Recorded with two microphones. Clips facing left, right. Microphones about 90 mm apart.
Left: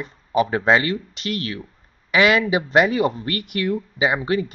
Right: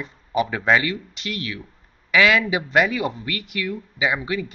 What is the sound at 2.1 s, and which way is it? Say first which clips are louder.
Speech: left 1 dB; 25° left (ahead or behind).